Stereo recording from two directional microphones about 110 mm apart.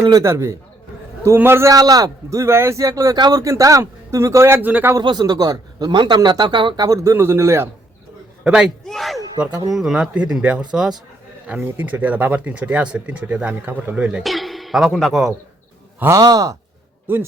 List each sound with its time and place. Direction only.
0.1 s speech: 25° right (ahead or behind)
1.7 s speech: 35° right (ahead or behind); by 4.9 s 15° right (ahead or behind)
4.9 s speech: 40° right (ahead or behind)
6.8 s speech: 30° right (ahead or behind)
8.4 s speech: 5° right (ahead or behind)
8.9 s a sound: centre (ahead or behind)
9.6 s speech: 5° right (ahead or behind)
16.0 s speech: 25° right (ahead or behind)
17.1 s speech: 20° right (ahead or behind)